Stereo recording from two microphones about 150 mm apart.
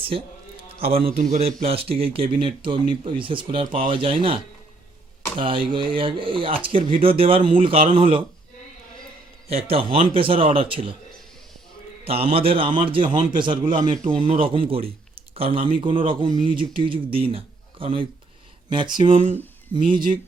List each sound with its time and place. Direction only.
0.0 s a sound: 35° right (ahead or behind)
0.9 s speech: 40° right (ahead or behind)
1.1 s a man's voice: 75° right (ahead or behind)
1.6 s speech: 40° right (ahead or behind)
5.4 s speech: 35° right (ahead or behind)
9.5 s speech: 40° right (ahead or behind)
12.0 s speech: 40° right (ahead or behind)
13.7 s a man's voice: 60° right (ahead or behind)
14.3 s speech: 35° right (ahead or behind)
15.1 s a sound: 40° right (ahead or behind)
15.8 s speech: 35° right (ahead or behind)